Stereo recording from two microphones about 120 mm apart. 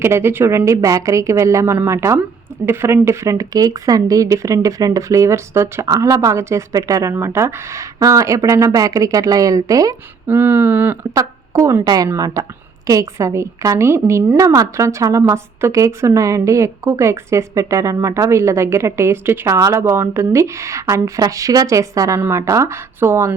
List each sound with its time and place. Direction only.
0.0 s a woman's voice: 20° right (ahead or behind)
10.2 s a sound: 15° right (ahead or behind)
11.2 s a woman's voice: 25° right (ahead or behind)